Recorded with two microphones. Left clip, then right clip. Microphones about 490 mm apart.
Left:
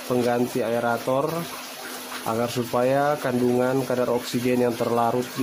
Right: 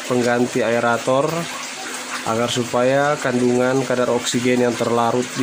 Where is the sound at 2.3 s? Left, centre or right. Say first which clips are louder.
Right 5 dB; left.